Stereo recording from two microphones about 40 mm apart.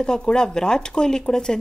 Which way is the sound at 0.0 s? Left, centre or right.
Centre.